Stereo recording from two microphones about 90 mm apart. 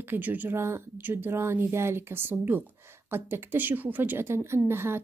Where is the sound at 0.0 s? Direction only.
20° right (ahead or behind).